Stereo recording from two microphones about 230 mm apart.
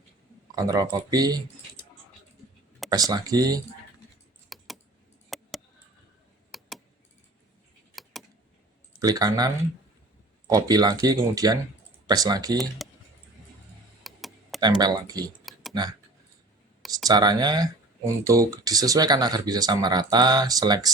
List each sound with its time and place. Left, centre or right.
0.5 s speech: centre
2.9 s speech: centre
4.4 s typing: centre
5.3 s a sound: centre
7.9 s vehicle: centre
9.0 s speech: centre
14.0 s tick-tock: centre
14.6 s speech: centre
17.1 s speech: centre